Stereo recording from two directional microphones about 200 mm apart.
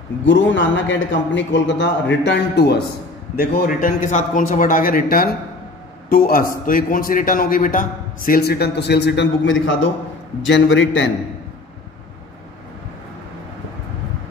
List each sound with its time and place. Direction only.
0.2 s a man's voice: 65° left (ahead or behind)